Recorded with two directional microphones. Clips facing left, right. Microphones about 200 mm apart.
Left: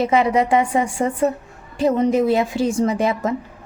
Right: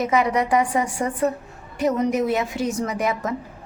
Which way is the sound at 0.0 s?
25° left (ahead or behind).